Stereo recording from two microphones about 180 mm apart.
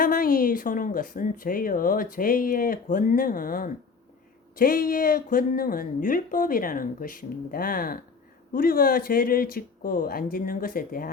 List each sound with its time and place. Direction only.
0.0 s speech: 55° left (ahead or behind)